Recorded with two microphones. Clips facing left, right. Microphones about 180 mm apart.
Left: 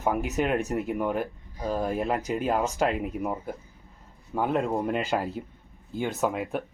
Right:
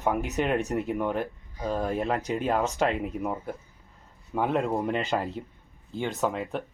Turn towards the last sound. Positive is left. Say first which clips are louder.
# left 1 dB
turn(degrees=5)  # may be behind; listen again after turning